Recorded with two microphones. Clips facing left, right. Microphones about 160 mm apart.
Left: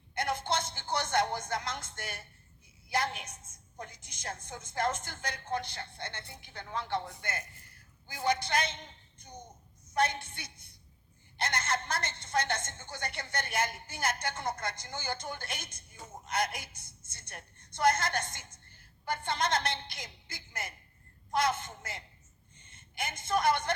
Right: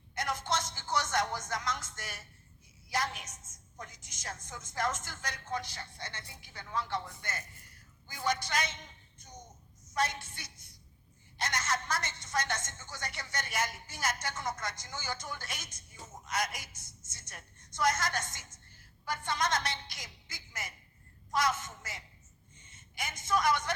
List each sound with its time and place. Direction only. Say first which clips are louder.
0.1 s music: left 2 dB; 55° left (ahead or behind)
2.0 s a woman's voice: left 3 dB; 55° left (ahead or behind)
8.5 s a woman's voice: left 3 dB; 55° left (ahead or behind)
9.1 s a sound: left 3 dB; 60° left (ahead or behind)
9.9 s a woman's voice: left 3 dB; 60° left (ahead or behind)